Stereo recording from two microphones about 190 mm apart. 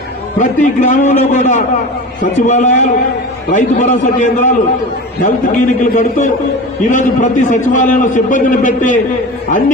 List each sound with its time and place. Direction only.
0.3 s a man's voice: 40° left (ahead or behind)